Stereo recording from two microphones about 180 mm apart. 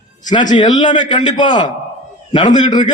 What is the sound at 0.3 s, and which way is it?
A man's voice, 25° left (ahead or behind).